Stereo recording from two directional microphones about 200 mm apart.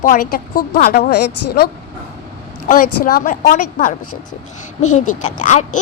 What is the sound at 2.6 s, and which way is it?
A woman's voice, 45° left (ahead or behind).